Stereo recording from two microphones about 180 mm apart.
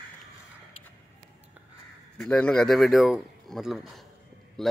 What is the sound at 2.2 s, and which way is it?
A man's voice, 5° left (ahead or behind).